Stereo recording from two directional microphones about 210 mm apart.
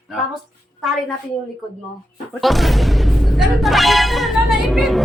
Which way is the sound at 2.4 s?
Centre (ahead or behind).